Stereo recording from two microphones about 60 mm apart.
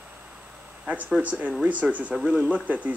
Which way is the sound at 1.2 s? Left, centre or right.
Right.